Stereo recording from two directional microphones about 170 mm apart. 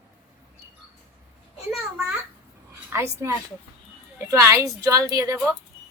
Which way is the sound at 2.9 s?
15° right (ahead or behind).